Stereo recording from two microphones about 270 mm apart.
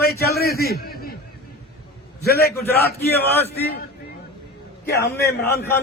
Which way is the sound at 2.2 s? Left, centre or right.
Left.